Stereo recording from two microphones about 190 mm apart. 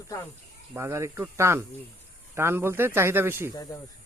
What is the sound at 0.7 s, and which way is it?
Speech, 15° right (ahead or behind).